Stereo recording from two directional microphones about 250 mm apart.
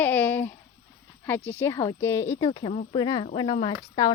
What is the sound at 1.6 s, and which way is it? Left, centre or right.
A woman's voice, centre.